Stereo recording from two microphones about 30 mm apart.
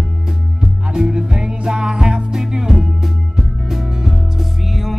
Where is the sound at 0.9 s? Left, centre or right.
Right.